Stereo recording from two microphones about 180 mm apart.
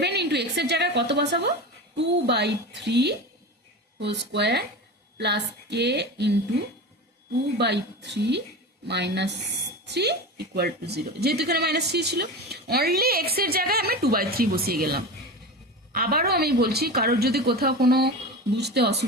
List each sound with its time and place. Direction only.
0.0 s a woman's voice: 70° right (ahead or behind)
7.6 s a woman's voice: 70° right (ahead or behind)